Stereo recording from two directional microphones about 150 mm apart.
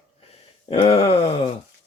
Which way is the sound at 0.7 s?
40° left (ahead or behind).